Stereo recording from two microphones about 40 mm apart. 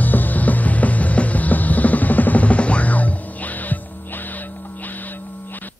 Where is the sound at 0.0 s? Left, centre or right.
Left.